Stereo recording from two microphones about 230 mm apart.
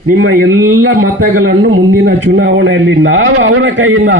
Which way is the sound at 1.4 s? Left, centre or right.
Right.